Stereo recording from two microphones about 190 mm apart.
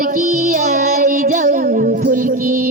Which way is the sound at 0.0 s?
45° right (ahead or behind).